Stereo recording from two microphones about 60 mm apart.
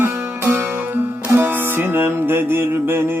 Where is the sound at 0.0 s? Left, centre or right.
Right.